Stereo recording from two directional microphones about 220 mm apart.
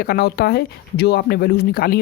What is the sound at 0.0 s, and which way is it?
Speech, 45° left (ahead or behind).